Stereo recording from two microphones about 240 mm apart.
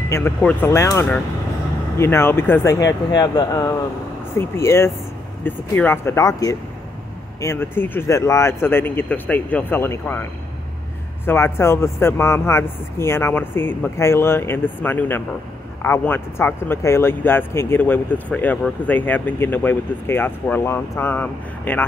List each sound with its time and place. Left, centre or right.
0.1 s speech: centre
11.2 s speech: centre